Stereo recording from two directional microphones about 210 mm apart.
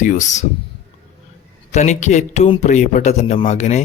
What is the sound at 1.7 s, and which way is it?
Speech, 35° left (ahead or behind).